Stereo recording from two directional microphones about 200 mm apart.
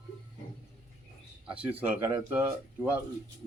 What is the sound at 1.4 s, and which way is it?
Speech, 5° right (ahead or behind).